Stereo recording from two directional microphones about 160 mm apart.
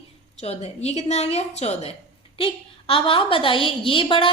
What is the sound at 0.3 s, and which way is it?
A woman's voice, 40° left (ahead or behind).